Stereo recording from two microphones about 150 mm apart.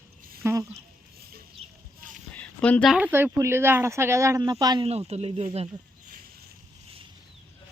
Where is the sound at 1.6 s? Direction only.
40° right (ahead or behind).